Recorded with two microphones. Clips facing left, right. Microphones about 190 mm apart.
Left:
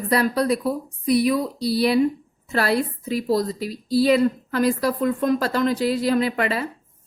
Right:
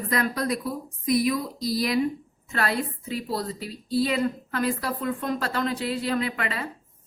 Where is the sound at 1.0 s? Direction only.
30° left (ahead or behind).